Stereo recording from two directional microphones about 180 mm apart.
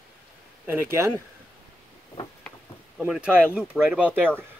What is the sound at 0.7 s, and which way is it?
Speech, 15° right (ahead or behind).